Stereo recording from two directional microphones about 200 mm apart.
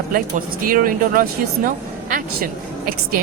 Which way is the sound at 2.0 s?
45° right (ahead or behind).